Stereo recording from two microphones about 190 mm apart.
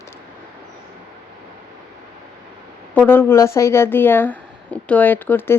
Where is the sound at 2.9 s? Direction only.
10° left (ahead or behind).